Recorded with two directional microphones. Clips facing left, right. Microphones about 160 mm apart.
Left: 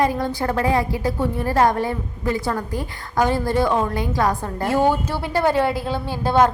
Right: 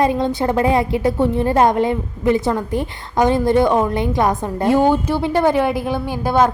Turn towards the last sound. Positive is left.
turn(degrees=-10)  # may be behind; listen again after turning